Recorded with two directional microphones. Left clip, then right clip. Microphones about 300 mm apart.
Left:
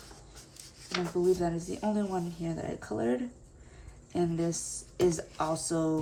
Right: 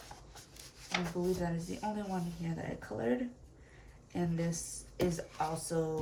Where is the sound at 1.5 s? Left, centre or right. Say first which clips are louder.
Left 6 dB; centre.